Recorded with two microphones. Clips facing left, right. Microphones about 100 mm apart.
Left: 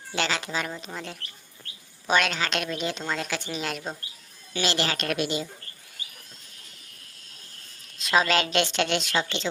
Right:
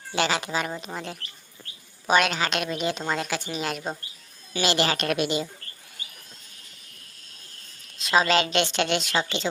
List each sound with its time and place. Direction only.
0.1 s speech: 10° right (ahead or behind)
2.0 s a woman's voice: 10° right (ahead or behind)
7.9 s a woman's voice: centre (ahead or behind)